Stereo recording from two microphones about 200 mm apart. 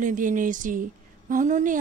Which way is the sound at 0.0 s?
40° right (ahead or behind).